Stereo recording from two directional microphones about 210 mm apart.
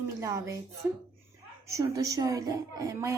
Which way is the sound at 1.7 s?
15° right (ahead or behind).